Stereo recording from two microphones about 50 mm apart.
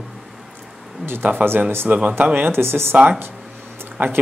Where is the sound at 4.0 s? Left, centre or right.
Right.